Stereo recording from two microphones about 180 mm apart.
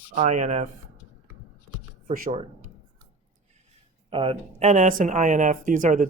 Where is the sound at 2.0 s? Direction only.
50° right (ahead or behind).